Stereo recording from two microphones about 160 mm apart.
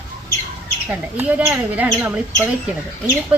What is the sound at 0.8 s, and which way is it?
Speech, 10° right (ahead or behind).